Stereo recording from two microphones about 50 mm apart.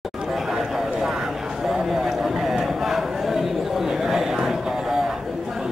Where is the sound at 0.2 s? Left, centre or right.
Centre.